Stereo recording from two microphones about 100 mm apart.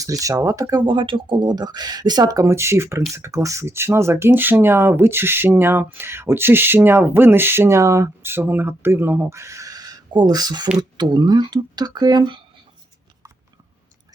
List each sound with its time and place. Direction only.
0.0 s speech: 35° right (ahead or behind)
0.9 s speech: 55° right (ahead or behind)